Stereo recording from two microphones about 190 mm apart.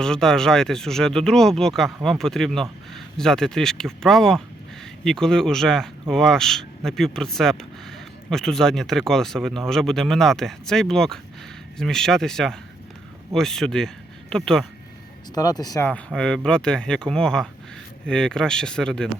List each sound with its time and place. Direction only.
0.0 s speech: 5° left (ahead or behind)
15.4 s speech: 20° left (ahead or behind)
15.9 s speech: 5° left (ahead or behind)